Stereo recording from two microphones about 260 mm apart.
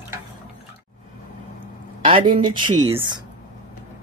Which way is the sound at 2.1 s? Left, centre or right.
Centre.